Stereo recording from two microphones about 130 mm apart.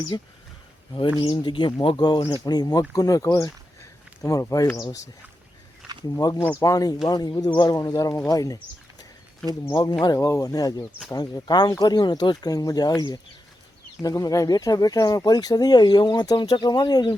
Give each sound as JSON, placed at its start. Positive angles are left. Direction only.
{"t": 0.1, "sound": "speech", "side_deg": 35}
{"t": 6.1, "sound": "speech", "side_deg": 25}